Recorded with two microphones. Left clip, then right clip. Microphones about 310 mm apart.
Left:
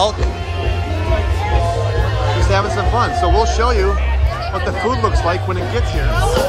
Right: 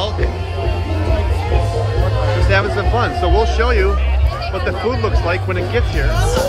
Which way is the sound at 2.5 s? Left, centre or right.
Centre.